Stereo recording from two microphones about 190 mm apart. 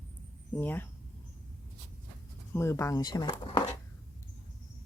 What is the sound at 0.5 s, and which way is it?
Speech, 10° left (ahead or behind).